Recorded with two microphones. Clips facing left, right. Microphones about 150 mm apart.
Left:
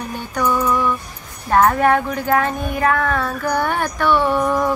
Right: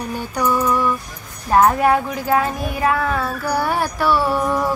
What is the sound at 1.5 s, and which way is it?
Child singing, 10° right (ahead or behind).